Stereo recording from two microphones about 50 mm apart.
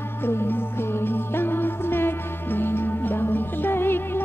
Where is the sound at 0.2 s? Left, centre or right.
Left.